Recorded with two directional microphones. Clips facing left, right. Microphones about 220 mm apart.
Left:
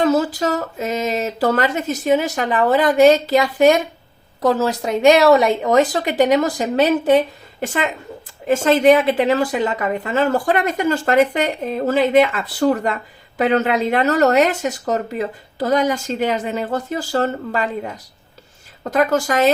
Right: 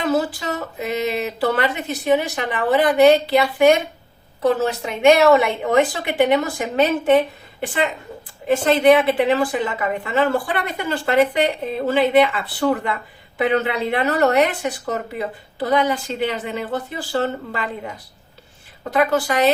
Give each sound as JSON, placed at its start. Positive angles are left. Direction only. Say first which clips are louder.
{"t": 0.0, "sound": "speech", "louder": "left 4 dB", "side_deg": 40}
{"t": 8.4, "sound": "a woman's voice", "louder": "left 1 dB", "side_deg": 45}
{"t": 18.8, "sound": "a woman's voice", "louder": "left 1 dB", "side_deg": 45}